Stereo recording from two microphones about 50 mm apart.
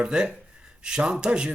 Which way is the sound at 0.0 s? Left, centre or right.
Centre.